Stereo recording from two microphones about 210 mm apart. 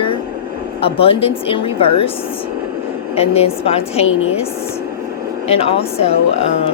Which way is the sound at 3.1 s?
30° left (ahead or behind).